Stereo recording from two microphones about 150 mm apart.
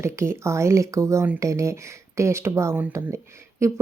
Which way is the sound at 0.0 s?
20° right (ahead or behind).